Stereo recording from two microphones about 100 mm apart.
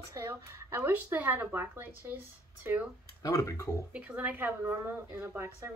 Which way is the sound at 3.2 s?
35° left (ahead or behind).